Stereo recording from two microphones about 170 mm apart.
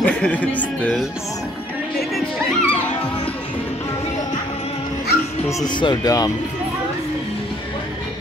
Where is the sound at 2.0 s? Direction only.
Centre (ahead or behind).